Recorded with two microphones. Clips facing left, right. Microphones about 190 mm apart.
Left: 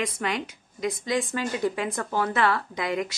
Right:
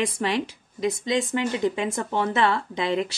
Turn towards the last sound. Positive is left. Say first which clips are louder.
# right 3 dB
turn(degrees=-25)  # may be behind; listen again after turning